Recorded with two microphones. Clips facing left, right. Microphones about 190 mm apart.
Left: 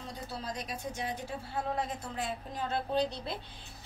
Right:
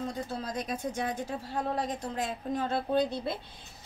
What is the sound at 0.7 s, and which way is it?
A woman's voice, 50° right (ahead or behind).